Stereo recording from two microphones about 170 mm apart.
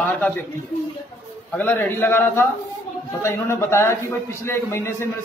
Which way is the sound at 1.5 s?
10° left (ahead or behind).